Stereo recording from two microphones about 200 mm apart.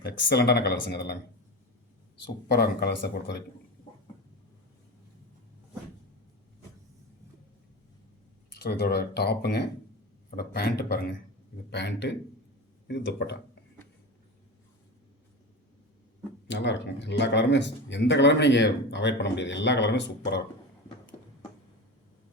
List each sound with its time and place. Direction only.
0.0 s speech: 55° left (ahead or behind)
2.5 s speech: 55° left (ahead or behind)
8.6 s speech: 55° left (ahead or behind)
16.5 s speech: 60° left (ahead or behind)